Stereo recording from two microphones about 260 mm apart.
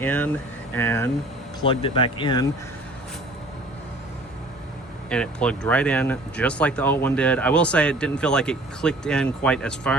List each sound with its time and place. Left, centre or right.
0.0 s speech: centre
1.6 s speech: centre
5.0 s speech: centre